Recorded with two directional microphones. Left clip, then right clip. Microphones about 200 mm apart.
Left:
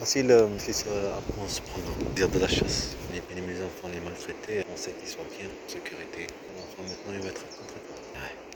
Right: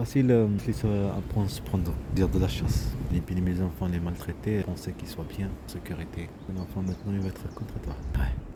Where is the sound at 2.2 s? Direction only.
10° right (ahead or behind).